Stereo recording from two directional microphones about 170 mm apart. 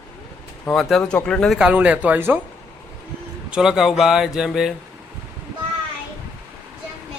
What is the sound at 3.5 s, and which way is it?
Speech, 5° right (ahead or behind).